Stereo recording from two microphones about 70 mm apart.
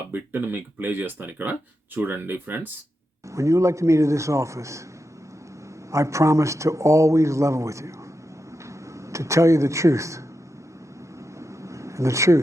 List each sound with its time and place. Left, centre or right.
0.1 s speech: right
3.3 s a man's voice: right
5.9 s a man's voice: right
9.0 s speech: right
11.3 s a sound: right